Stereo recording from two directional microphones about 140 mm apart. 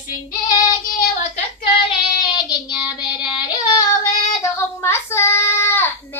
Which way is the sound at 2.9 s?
30° left (ahead or behind).